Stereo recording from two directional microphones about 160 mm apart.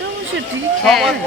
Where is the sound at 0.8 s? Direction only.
Centre (ahead or behind).